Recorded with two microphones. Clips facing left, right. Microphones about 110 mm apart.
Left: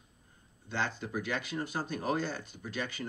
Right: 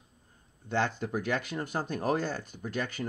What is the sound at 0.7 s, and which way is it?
Speech, 50° right (ahead or behind).